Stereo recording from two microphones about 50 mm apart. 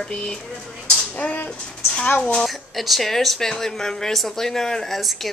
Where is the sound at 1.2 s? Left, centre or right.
Left.